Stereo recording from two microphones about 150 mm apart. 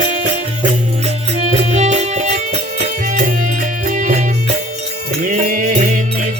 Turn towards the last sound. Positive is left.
turn(degrees=-55)  # may be behind; listen again after turning